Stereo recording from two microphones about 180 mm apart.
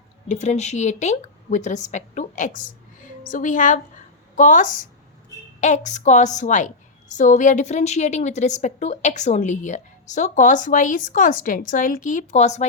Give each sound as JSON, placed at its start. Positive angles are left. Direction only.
{"t": 0.3, "sound": "a woman's voice", "side_deg": 40}